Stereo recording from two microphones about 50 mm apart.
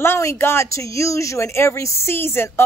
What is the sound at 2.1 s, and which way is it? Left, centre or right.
Speech, left.